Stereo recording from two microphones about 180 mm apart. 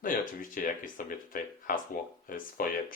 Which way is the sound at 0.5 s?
50° left (ahead or behind).